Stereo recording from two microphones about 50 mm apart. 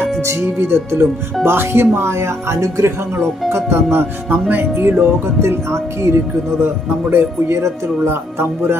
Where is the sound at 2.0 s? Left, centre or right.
Right.